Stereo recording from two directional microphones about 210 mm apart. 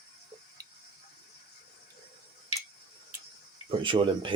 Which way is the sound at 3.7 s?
25° right (ahead or behind).